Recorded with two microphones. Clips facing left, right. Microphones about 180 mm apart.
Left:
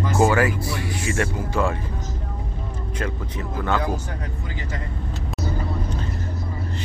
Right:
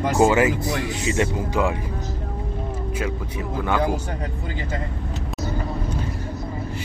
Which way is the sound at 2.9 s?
10° right (ahead or behind).